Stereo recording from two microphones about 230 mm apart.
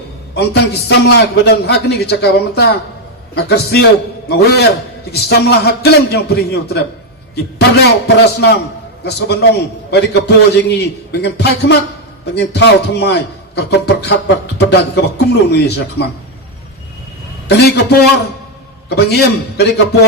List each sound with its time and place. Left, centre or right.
0.3 s a man's voice: left
17.6 s a man's voice: left